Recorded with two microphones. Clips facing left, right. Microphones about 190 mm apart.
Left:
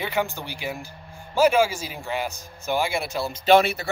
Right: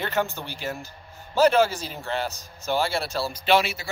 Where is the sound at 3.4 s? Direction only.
50° left (ahead or behind).